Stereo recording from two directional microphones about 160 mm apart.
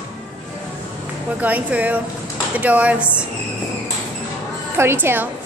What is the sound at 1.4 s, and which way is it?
Speech, 10° right (ahead or behind).